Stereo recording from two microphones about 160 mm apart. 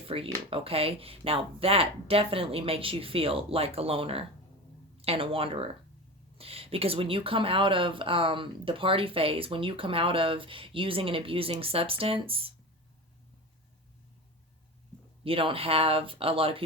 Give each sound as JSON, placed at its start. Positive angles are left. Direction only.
{"t": 0.0, "sound": "speech", "side_deg": -35}
{"t": 15.2, "sound": "speech", "side_deg": -35}